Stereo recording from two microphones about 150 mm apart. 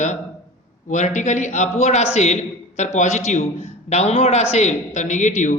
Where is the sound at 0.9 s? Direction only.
55° left (ahead or behind).